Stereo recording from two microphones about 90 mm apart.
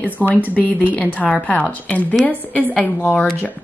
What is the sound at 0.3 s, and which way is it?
A woman's voice, 20° left (ahead or behind).